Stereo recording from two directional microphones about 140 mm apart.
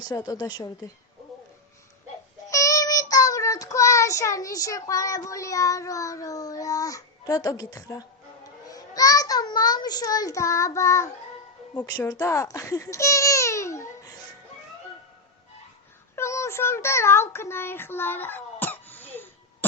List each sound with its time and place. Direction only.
0.0 s speech: 25° left (ahead or behind)
2.5 s child singing: 25° left (ahead or behind)
8.7 s a child's voice: 25° left (ahead or behind)
16.1 s a sound: 20° left (ahead or behind)